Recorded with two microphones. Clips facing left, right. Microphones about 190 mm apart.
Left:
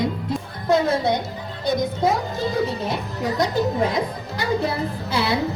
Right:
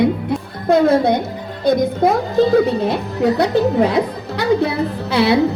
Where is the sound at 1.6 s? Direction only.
60° right (ahead or behind).